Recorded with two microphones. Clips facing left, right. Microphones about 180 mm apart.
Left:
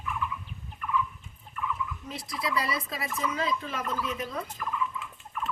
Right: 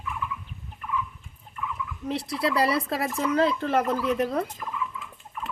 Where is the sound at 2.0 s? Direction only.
65° right (ahead or behind).